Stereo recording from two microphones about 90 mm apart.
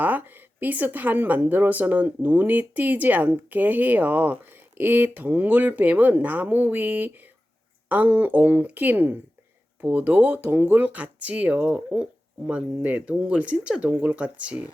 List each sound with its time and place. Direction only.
0.0 s speech: 20° right (ahead or behind)